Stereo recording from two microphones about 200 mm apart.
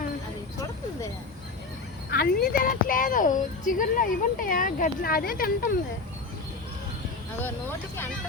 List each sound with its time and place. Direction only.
2.0 s speech: 50° left (ahead or behind)